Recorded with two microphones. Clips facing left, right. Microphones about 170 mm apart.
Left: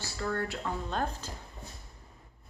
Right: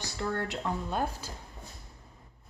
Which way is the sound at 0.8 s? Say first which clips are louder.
Right 1 dB; 10° right (ahead or behind).